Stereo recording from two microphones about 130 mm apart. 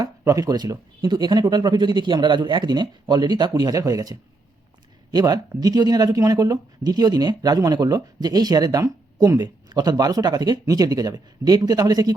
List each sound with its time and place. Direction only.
0.0 s speech: 25° right (ahead or behind)